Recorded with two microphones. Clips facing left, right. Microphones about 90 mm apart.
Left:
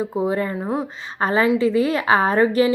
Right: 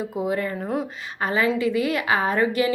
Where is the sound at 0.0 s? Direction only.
30° left (ahead or behind).